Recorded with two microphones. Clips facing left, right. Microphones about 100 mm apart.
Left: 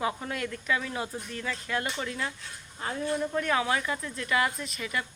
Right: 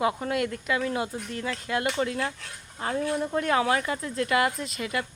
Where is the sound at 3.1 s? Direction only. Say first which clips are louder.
Right 2 dB; 30° right (ahead or behind).